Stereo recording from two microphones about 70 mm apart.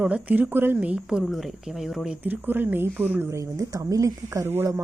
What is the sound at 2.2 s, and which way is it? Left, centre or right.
Speech, right.